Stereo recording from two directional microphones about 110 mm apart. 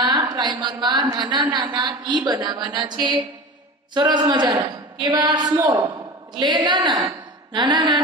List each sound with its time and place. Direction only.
0.0 s a woman's voice: 40° right (ahead or behind)
5.9 s speech: 45° right (ahead or behind)
7.5 s music: 45° right (ahead or behind)